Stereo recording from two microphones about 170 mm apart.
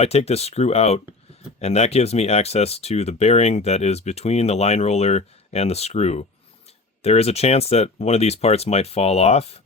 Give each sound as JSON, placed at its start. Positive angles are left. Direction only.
{"t": 0.0, "sound": "speech", "side_deg": 35}